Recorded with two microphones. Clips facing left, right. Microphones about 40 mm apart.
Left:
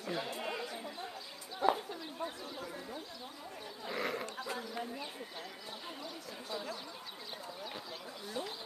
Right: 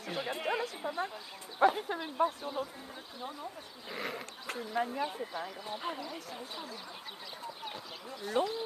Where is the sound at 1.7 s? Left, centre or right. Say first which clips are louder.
Right 10 dB; right.